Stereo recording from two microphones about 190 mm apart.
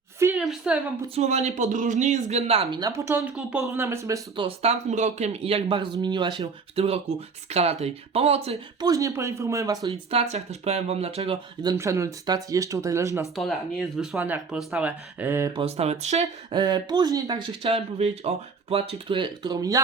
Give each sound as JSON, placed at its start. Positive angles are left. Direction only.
{"t": 0.2, "sound": "a sound", "side_deg": -10}
{"t": 0.4, "sound": "a woman's voice", "side_deg": -5}
{"t": 1.1, "sound": "speech", "side_deg": -35}
{"t": 2.8, "sound": "speech", "side_deg": -15}
{"t": 4.4, "sound": "speech", "side_deg": -35}
{"t": 8.9, "sound": "speech", "side_deg": -15}
{"t": 10.1, "sound": "speech", "side_deg": -35}
{"t": 11.6, "sound": "speech", "side_deg": -20}
{"t": 15.5, "sound": "speech", "side_deg": -35}